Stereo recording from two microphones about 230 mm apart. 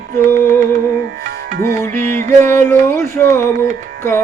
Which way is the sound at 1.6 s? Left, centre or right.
Centre.